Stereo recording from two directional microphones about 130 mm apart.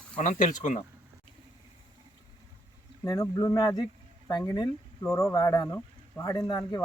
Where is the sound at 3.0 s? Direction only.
25° left (ahead or behind).